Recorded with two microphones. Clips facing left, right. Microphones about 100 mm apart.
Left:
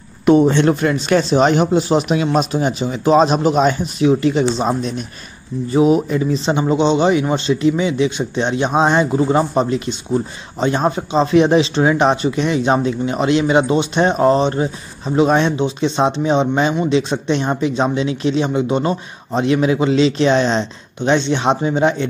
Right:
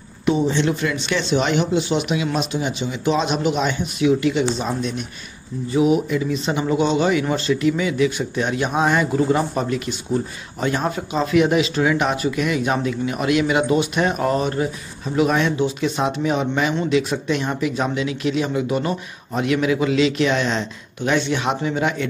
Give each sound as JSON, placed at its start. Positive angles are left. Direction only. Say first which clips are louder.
{"t": 0.2, "sound": "a man's voice", "louder": "left 7 dB", "side_deg": 55}